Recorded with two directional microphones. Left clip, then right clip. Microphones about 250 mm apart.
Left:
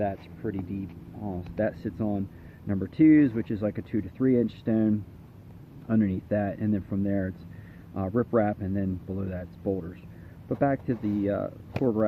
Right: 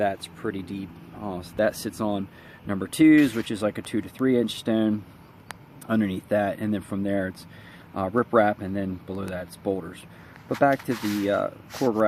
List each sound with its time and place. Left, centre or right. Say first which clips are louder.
0.0 s speech: right 5 dB; centre
1.2 s speech: right 4 dB; right
1.5 s speech: right 5 dB; centre
10.6 s speech: right 5 dB; centre